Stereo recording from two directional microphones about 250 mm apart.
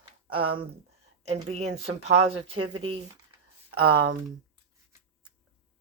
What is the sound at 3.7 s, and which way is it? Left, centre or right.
Speech, right.